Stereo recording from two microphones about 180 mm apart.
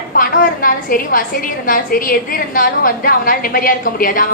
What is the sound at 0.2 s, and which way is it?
A woman's voice, 55° left (ahead or behind).